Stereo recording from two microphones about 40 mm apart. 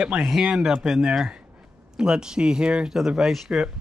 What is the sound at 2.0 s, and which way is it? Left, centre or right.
Speech, centre.